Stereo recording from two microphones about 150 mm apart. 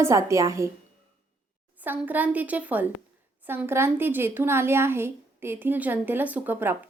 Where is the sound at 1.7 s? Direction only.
10° right (ahead or behind).